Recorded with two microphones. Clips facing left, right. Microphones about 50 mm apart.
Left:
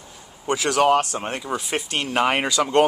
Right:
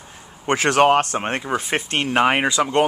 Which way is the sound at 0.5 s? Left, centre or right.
Right.